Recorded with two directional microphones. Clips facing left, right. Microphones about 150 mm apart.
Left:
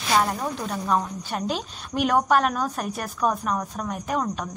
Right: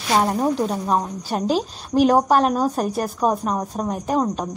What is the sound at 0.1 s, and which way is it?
Speech, 30° right (ahead or behind).